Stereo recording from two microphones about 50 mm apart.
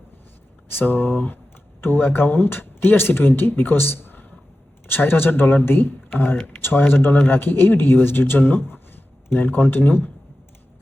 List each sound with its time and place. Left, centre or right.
0.7 s speech: left